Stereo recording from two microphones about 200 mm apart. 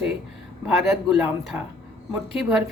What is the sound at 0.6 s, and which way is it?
Speech, 5° right (ahead or behind).